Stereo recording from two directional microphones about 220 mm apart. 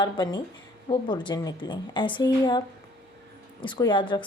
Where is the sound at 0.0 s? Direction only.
20° left (ahead or behind).